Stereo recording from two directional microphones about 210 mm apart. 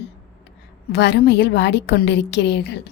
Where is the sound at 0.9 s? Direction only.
55° left (ahead or behind).